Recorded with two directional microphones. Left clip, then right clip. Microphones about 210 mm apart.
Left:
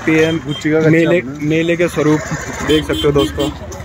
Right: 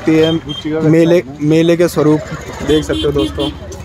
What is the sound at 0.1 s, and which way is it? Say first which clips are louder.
Speech: right 2 dB; 10° right (ahead or behind).